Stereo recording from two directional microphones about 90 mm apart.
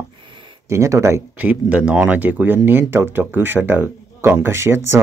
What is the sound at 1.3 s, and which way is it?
Speech, 15° right (ahead or behind).